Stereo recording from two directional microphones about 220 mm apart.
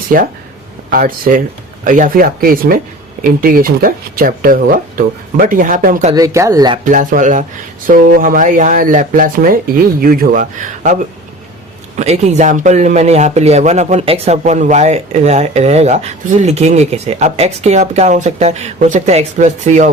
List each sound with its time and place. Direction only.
0.1 s speech: 40° right (ahead or behind)
6.1 s speech: 15° right (ahead or behind)
6.8 s speech: 35° right (ahead or behind)
11.9 s speech: 30° right (ahead or behind)